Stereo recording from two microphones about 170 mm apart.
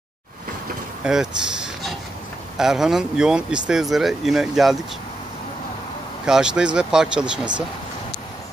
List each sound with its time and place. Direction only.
1.0 s speech: 5° right (ahead or behind)
6.2 s speech: 5° right (ahead or behind)